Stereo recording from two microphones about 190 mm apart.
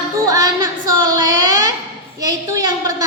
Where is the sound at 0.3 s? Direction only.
20° right (ahead or behind).